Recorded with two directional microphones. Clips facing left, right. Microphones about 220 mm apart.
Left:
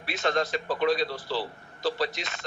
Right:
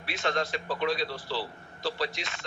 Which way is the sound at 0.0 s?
40° left (ahead or behind).